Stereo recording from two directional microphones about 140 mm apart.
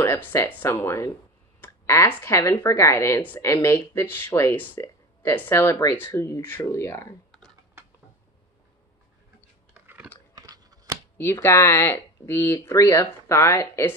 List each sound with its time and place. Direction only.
0.0 s speech: 15° left (ahead or behind)
7.2 s typing: 5° left (ahead or behind)
7.8 s a sound: 15° right (ahead or behind)
10.3 s crunch: 25° right (ahead or behind)
11.4 s speech: 20° left (ahead or behind)